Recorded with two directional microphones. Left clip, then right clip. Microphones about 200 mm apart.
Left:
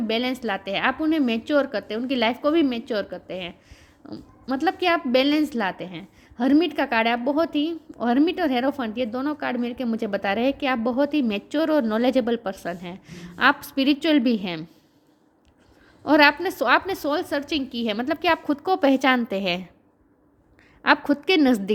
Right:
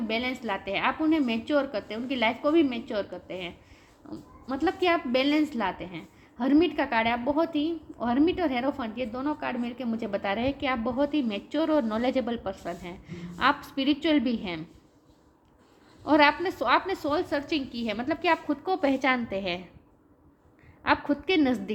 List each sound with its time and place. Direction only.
0.1 s a woman's voice: 55° left (ahead or behind)
16.0 s a woman's voice: 55° left (ahead or behind)
20.8 s a woman's voice: 55° left (ahead or behind)